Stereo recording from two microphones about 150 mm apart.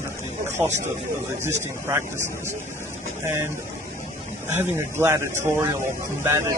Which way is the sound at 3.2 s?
15° right (ahead or behind).